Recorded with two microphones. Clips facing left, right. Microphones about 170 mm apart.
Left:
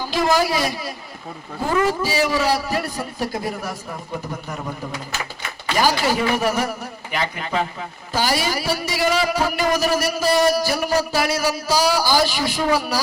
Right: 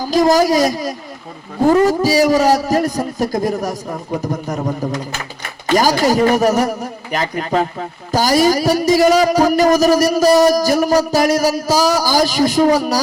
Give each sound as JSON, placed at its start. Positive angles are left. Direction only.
{"t": 0.0, "sound": "a man's voice", "side_deg": -40}